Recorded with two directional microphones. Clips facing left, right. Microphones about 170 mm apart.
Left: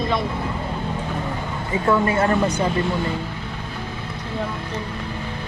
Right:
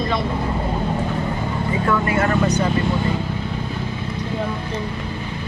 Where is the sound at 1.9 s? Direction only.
30° left (ahead or behind).